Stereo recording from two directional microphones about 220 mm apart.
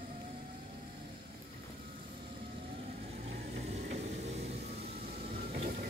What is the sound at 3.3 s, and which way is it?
Vehicle, 30° right (ahead or behind).